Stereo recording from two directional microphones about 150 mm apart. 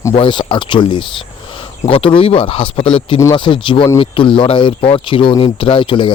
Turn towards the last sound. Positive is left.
turn(degrees=35)  # may be behind; listen again after turning